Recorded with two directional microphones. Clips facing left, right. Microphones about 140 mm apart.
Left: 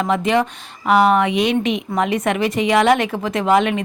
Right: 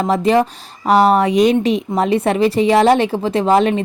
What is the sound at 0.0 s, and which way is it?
A woman's voice, 35° right (ahead or behind).